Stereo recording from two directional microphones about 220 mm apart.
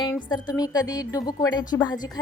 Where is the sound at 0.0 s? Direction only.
20° left (ahead or behind).